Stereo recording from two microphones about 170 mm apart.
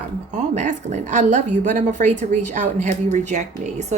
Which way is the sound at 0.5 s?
45° right (ahead or behind).